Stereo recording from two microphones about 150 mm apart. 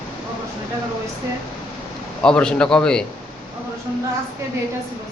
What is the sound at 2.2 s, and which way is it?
Speech, 5° left (ahead or behind).